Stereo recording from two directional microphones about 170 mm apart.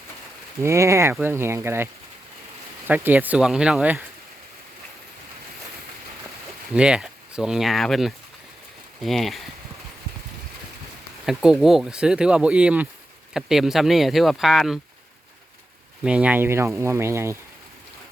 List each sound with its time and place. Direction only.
0.6 s speech: 15° right (ahead or behind)
6.7 s speech: 5° right (ahead or behind)
11.3 s speech: 5° right (ahead or behind)
16.0 s speech: 10° right (ahead or behind)